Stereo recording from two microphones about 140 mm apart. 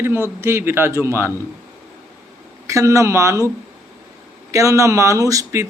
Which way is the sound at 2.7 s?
20° right (ahead or behind).